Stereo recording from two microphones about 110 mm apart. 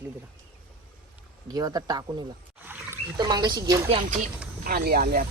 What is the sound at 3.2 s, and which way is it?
Speech, 40° right (ahead or behind).